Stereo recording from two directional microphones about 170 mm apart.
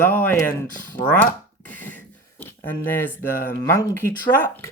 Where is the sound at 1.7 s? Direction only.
10° left (ahead or behind).